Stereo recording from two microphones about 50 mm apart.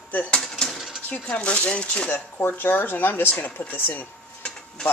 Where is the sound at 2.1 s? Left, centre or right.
Left.